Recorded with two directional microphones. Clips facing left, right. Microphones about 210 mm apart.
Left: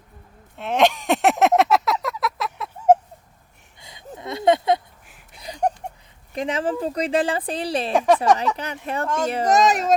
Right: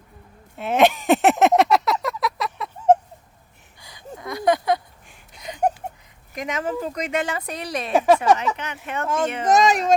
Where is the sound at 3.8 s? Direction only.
20° left (ahead or behind).